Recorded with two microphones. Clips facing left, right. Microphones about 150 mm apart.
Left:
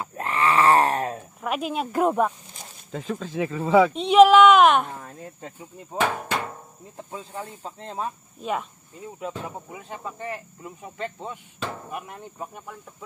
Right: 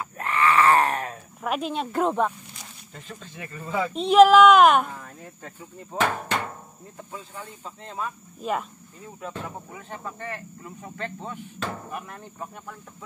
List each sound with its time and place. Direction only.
0.0 s groan: 30° left (ahead or behind)
1.4 s speech: 5° left (ahead or behind)
3.3 s speech: 90° left
3.9 s a woman's voice: centre (ahead or behind)
4.9 s speech: 25° left (ahead or behind)
5.9 s speech: 5° left (ahead or behind)
7.1 s speech: 35° left (ahead or behind)
8.4 s a woman's voice: centre (ahead or behind); by 11.3 s 15° left (ahead or behind)
11.6 s chop: centre (ahead or behind)
11.9 s speech: 15° left (ahead or behind)